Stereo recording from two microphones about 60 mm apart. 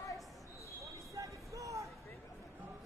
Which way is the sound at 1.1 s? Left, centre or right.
Right.